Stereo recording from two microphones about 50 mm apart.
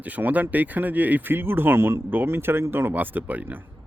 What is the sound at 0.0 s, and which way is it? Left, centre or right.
Speech, right.